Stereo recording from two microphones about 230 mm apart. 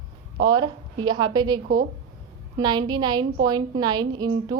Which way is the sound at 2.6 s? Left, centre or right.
Centre.